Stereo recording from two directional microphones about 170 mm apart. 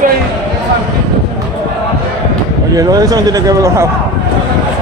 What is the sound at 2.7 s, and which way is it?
A man's voice, 20° right (ahead or behind).